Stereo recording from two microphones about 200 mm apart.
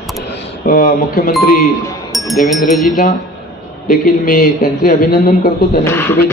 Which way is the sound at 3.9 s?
45° left (ahead or behind).